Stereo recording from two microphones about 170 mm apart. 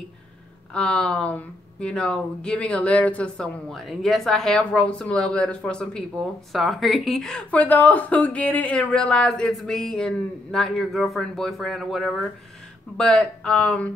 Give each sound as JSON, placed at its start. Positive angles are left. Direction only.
{"t": 0.7, "sound": "speech", "side_deg": 5}